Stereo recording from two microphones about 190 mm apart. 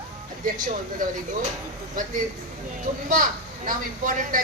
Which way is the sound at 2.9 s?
45° right (ahead or behind).